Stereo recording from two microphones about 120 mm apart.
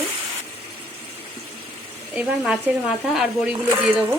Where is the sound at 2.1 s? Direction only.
10° right (ahead or behind).